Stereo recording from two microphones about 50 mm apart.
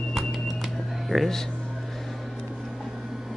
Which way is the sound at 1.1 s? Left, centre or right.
Centre.